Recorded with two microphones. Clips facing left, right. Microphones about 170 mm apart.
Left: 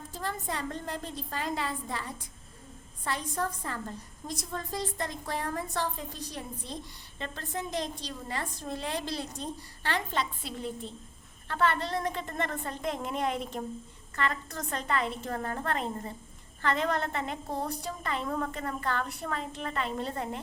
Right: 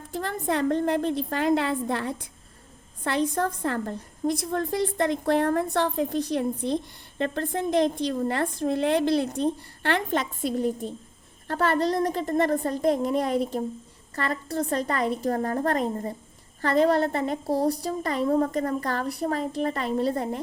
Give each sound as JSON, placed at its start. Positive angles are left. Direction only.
{"t": 0.1, "sound": "a woman's voice", "side_deg": -60}